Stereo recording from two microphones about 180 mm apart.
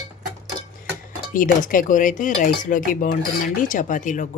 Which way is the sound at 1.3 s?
50° left (ahead or behind).